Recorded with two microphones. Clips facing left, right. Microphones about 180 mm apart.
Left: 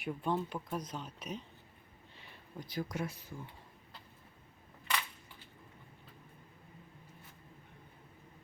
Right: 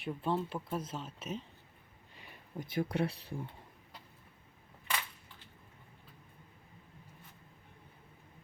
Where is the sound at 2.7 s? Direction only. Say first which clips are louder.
Right 5 dB; 30° right (ahead or behind).